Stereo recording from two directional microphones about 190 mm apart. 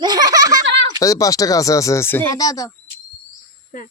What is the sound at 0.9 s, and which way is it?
Speech, 20° left (ahead or behind).